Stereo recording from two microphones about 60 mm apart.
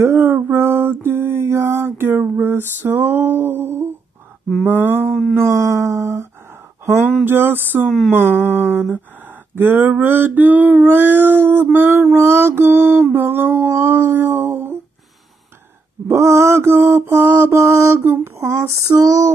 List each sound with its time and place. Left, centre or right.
0.0 s mantra: right
4.6 s mantra: right
5.3 s a sound: right
7.2 s mantra: right
12.1 s mantra: right
16.1 s mantra: right
18.4 s female singing: right
18.7 s a sound: right